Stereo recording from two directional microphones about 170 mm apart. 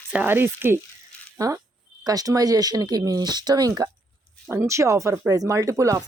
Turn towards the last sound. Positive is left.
turn(degrees=-20)  # may be behind; listen again after turning